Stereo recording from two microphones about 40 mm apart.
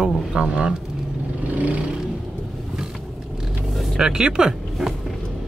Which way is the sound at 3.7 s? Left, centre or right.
Centre.